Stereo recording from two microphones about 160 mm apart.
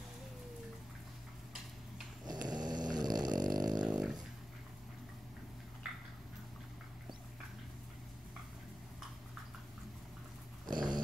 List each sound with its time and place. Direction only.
2.2 s snoring: 25° right (ahead or behind)
3.5 s dog: 25° right (ahead or behind)
3.8 s dog: 5° right (ahead or behind)
10.7 s dog: 25° right (ahead or behind)